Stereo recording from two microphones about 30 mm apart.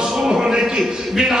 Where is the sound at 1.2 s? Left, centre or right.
Right.